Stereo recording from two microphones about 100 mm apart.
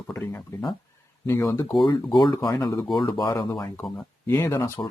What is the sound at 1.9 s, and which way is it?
Speech, 45° left (ahead or behind).